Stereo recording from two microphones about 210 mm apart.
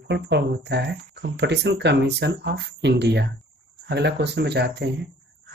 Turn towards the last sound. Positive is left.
turn(degrees=-55)  # may be behind; listen again after turning